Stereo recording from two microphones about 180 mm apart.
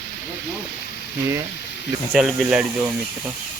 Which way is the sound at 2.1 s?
5° right (ahead or behind).